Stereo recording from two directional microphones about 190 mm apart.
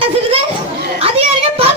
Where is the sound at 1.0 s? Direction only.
30° right (ahead or behind).